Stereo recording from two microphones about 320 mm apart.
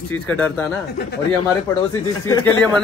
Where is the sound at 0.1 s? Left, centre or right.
Centre.